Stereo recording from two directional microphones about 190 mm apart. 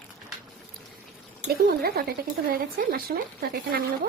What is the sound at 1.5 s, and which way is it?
Speech, 55° right (ahead or behind).